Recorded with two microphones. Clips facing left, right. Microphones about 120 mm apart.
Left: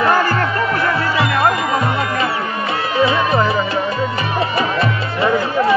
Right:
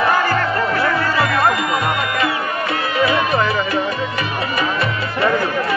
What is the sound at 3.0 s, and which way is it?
Music, 25° left (ahead or behind).